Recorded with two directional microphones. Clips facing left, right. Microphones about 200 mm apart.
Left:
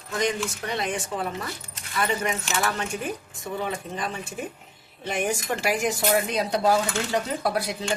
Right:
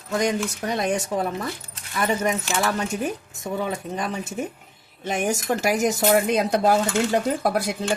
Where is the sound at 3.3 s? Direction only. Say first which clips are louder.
Right 3 dB; 45° right (ahead or behind).